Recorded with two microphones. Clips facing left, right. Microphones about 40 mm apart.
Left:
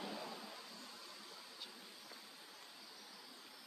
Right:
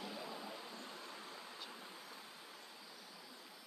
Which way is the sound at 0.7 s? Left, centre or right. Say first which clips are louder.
Right 4 dB; right.